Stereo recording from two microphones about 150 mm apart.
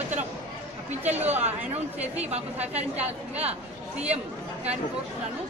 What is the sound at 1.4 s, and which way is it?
A woman's voice, 45° right (ahead or behind).